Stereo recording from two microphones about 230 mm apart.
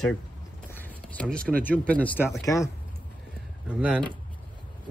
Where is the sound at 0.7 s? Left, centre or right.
Centre.